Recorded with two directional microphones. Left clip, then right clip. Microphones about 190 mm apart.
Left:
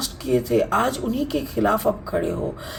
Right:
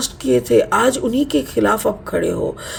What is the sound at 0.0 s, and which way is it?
Speech, 40° right (ahead or behind).